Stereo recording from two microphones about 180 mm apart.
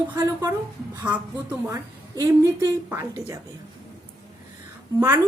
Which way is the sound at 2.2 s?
20° right (ahead or behind).